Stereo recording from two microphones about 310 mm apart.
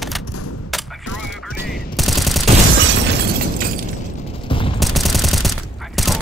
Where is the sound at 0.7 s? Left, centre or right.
Centre.